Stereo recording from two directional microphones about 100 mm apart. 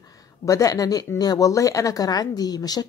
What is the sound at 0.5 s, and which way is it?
Speech, 35° left (ahead or behind).